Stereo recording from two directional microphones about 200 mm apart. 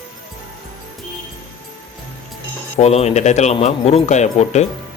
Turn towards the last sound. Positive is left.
turn(degrees=35)  # may be behind; listen again after turning